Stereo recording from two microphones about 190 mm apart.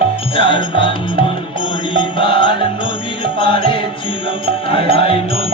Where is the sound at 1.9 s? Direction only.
25° left (ahead or behind).